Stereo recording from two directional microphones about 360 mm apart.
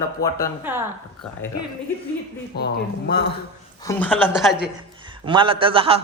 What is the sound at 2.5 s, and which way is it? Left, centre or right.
Speech, left.